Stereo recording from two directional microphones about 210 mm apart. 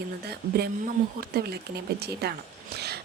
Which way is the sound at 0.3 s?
50° right (ahead or behind).